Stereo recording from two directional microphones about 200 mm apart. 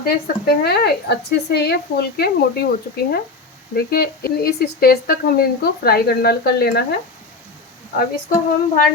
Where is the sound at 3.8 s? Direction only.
50° left (ahead or behind).